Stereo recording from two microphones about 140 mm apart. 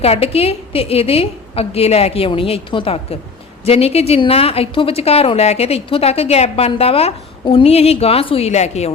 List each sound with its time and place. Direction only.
0.0 s a woman's voice: 45° left (ahead or behind)